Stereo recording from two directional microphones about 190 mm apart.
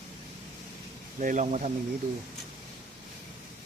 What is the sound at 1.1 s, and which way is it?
Speech, 40° right (ahead or behind).